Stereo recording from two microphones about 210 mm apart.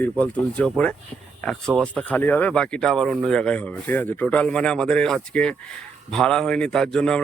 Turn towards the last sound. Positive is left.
turn(degrees=5)  # may be behind; listen again after turning